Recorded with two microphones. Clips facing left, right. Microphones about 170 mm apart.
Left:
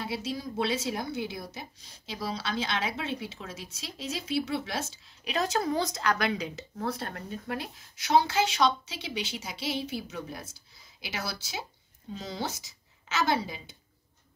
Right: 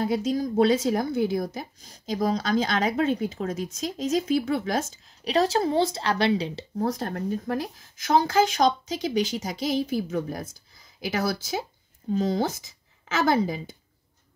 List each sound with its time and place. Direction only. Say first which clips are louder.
0.0 s a woman's voice: right 9 dB; 45° right (ahead or behind)